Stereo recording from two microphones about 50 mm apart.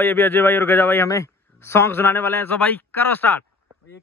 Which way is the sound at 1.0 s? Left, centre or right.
Left.